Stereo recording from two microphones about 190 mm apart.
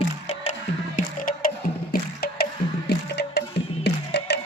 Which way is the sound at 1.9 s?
55° left (ahead or behind).